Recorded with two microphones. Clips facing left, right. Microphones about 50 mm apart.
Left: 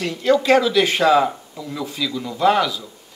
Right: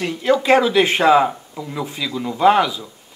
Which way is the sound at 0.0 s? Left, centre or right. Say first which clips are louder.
Even; centre.